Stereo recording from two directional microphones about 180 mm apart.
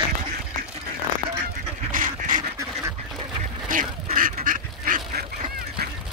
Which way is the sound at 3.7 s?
50° right (ahead or behind).